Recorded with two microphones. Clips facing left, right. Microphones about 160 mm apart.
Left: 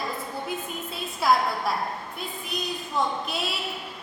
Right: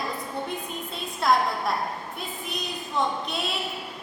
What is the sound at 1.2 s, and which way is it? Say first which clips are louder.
A woman's voice: even; 5° left (ahead or behind).